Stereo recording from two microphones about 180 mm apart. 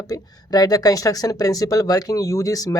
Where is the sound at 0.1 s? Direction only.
20° left (ahead or behind).